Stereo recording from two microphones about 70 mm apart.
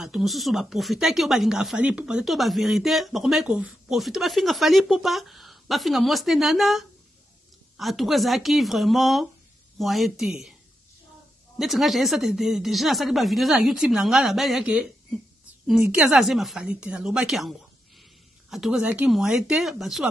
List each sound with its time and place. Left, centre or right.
0.0 s speech: centre
1.8 s speech: centre
3.4 s speech: centre
4.0 s speech: centre
11.5 s speech: centre
16.1 s speech: centre
16.6 s speech: centre
19.0 s speech: centre